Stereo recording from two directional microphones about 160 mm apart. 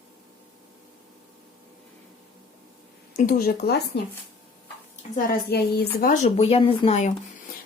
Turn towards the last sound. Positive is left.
turn(degrees=40)  # may be behind; listen again after turning